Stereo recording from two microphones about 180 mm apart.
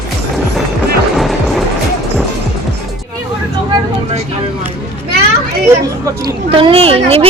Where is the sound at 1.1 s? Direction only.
Centre (ahead or behind).